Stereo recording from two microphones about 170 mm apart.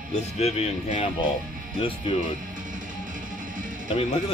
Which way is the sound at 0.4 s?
40° left (ahead or behind).